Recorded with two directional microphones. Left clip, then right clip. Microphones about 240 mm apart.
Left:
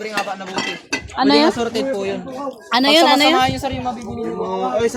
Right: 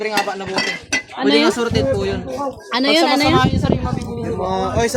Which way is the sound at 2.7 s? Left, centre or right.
Left.